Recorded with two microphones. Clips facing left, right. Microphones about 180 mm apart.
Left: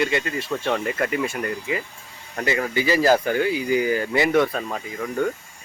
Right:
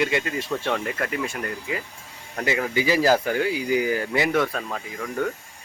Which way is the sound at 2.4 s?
5° right (ahead or behind).